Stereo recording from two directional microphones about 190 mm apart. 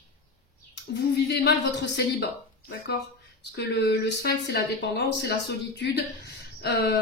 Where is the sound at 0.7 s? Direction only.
65° left (ahead or behind).